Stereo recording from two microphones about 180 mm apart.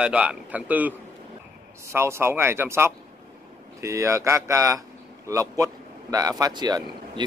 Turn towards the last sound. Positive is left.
turn(degrees=-25)  # may be behind; listen again after turning